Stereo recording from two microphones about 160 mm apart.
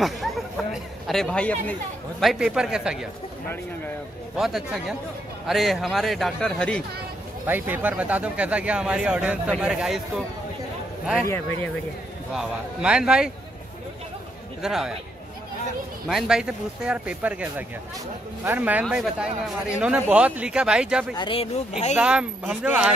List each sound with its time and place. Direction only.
0.0 s chatter: centre (ahead or behind)
1.0 s a man's voice: 5° left (ahead or behind)
4.4 s a man's voice: centre (ahead or behind)
7.4 s speech: 10° right (ahead or behind)
12.4 s a man's voice: 5° right (ahead or behind)
14.6 s a man's voice: 5° right (ahead or behind)
16.1 s speech: 5° right (ahead or behind)
21.2 s speech: 35° left (ahead or behind)
21.9 s speech: 5° right (ahead or behind)